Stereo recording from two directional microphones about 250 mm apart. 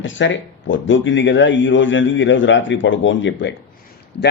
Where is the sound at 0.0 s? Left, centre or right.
Left.